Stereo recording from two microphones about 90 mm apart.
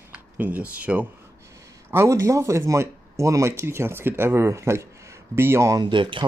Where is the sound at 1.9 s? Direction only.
30° right (ahead or behind).